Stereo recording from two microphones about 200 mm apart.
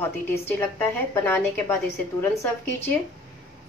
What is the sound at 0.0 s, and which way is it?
A woman's voice, 10° left (ahead or behind).